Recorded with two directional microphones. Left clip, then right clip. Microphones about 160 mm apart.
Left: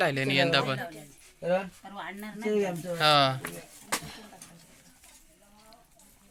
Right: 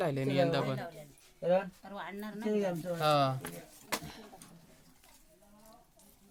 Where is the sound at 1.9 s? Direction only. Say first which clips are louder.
Left 3 dB; 35° right (ahead or behind).